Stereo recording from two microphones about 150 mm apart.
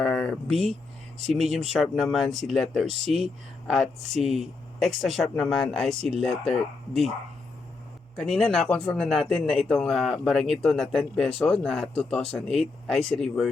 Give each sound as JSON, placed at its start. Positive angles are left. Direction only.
{"t": 0.0, "sound": "a sound", "side_deg": 5}
{"t": 0.5, "sound": "speech", "side_deg": -45}
{"t": 1.3, "sound": "a man's voice", "side_deg": 0}
{"t": 8.1, "sound": "a man's voice", "side_deg": 0}